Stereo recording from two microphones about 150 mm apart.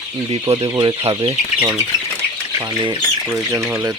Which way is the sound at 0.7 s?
30° right (ahead or behind).